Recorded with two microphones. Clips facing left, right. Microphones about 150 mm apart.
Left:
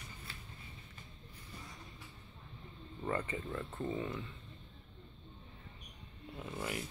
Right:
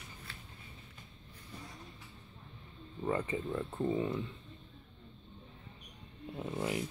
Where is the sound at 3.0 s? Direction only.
10° right (ahead or behind).